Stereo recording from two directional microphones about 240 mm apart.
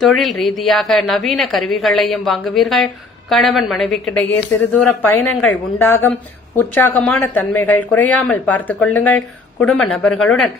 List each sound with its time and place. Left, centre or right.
0.0 s a woman's voice: centre
5.2 s a woman's voice: left
5.5 s speech: centre